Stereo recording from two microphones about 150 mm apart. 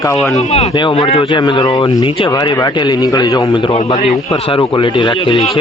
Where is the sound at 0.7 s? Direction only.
30° left (ahead or behind).